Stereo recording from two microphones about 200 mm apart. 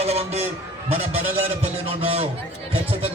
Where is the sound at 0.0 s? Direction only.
30° right (ahead or behind).